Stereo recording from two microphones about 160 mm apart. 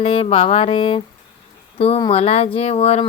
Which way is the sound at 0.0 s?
35° left (ahead or behind).